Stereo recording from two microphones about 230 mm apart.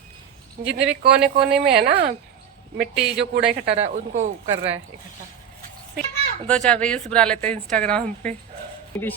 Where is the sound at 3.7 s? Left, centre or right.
Right.